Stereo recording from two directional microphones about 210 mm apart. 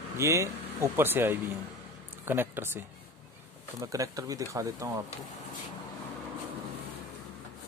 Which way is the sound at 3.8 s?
15° right (ahead or behind).